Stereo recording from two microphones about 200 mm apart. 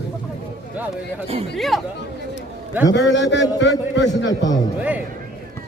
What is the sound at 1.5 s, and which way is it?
Speech, centre (ahead or behind).